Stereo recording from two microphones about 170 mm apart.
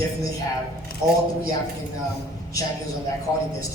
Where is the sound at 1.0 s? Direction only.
5° right (ahead or behind).